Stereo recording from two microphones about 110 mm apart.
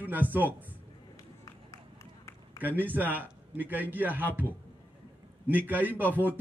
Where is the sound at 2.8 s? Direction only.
15° right (ahead or behind).